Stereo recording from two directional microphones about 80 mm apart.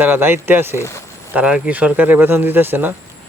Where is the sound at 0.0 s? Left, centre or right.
Right.